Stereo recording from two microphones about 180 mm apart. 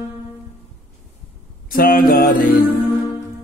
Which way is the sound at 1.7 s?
55° left (ahead or behind).